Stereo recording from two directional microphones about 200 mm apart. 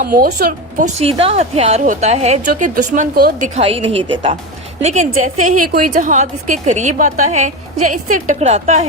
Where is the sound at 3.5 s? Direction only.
30° right (ahead or behind).